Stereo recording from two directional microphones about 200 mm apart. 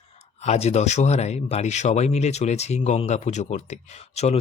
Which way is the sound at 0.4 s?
30° left (ahead or behind).